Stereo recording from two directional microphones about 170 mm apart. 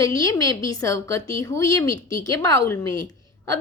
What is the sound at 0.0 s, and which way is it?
A woman's voice, 20° left (ahead or behind).